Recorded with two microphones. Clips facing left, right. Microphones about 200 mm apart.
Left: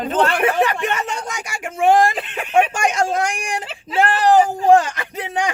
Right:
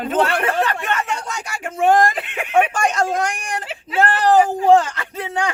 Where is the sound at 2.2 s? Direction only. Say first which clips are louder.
Even; 10° right (ahead or behind).